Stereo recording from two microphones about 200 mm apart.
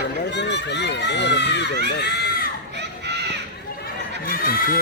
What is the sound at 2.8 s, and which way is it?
Children playing, 60° right (ahead or behind).